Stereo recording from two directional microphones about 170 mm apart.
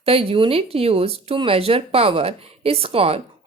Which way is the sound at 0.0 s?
35° right (ahead or behind).